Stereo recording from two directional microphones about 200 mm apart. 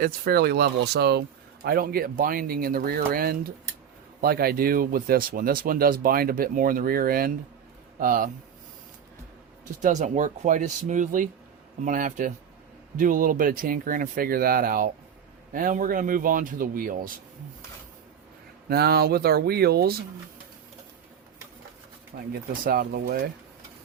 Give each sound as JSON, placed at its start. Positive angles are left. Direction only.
{"t": 0.0, "sound": "speech", "side_deg": -50}
{"t": 9.8, "sound": "speech", "side_deg": -35}
{"t": 18.7, "sound": "speech", "side_deg": -50}
{"t": 22.3, "sound": "speech", "side_deg": -50}